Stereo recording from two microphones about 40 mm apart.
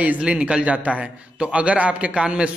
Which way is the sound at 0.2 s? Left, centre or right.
Right.